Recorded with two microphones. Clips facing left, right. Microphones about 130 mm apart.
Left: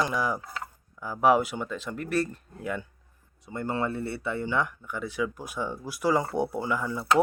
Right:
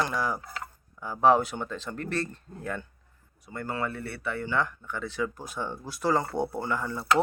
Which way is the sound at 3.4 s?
20° left (ahead or behind).